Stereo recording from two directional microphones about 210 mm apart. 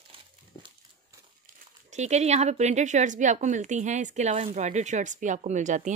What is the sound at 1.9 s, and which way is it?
A woman's voice, 35° right (ahead or behind).